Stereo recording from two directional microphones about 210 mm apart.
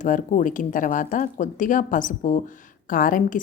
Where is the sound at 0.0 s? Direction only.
35° left (ahead or behind).